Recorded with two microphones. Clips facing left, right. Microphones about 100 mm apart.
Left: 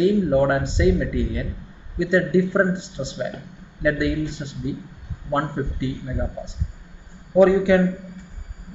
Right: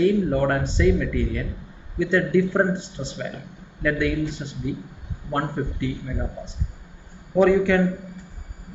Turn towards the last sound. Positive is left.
turn(degrees=10)  # may be behind; listen again after turning